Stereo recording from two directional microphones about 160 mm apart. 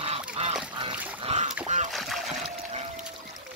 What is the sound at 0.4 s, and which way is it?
Duck, 40° right (ahead or behind).